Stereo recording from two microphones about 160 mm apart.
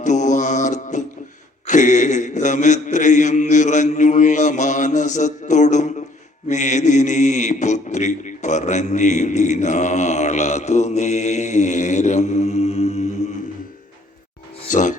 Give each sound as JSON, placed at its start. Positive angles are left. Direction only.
{"t": 0.0, "sound": "mantra", "side_deg": 50}
{"t": 14.7, "sound": "music", "side_deg": 50}